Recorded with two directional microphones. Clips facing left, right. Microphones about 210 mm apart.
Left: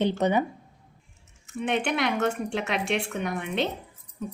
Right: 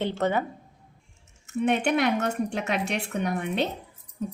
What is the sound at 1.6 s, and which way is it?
Speech, 40° right (ahead or behind).